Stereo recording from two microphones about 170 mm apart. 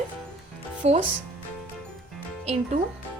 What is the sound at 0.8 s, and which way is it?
Speech, 40° right (ahead or behind).